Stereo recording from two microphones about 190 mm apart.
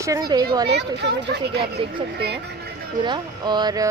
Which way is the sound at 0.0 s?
20° right (ahead or behind).